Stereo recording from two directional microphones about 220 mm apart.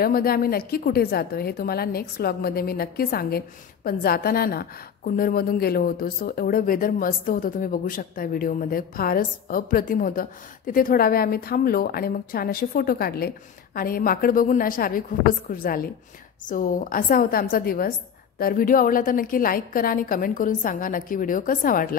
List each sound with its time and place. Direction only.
0.0 s a woman's voice: 45° left (ahead or behind)